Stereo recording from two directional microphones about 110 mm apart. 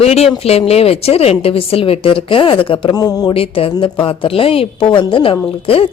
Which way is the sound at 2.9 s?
35° left (ahead or behind).